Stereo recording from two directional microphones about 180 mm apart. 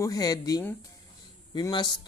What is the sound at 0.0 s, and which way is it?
A man's voice, 20° left (ahead or behind).